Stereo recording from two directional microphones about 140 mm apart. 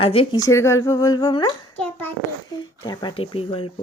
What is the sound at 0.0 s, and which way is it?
Speech, 45° left (ahead or behind).